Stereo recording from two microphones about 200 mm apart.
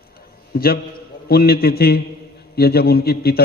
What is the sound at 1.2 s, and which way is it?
Speech, 50° left (ahead or behind).